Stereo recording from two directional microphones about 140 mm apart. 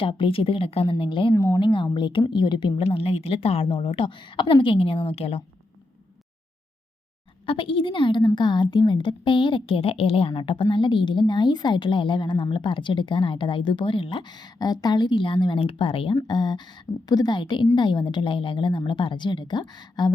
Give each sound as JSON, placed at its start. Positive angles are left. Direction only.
{"t": 0.0, "sound": "a woman's voice", "side_deg": 40}
{"t": 1.3, "sound": "a woman's voice", "side_deg": 20}
{"t": 1.5, "sound": "a woman's voice", "side_deg": 35}
{"t": 7.4, "sound": "a woman's voice", "side_deg": 40}